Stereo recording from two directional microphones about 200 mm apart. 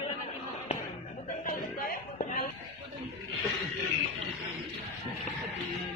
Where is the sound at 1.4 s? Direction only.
45° left (ahead or behind).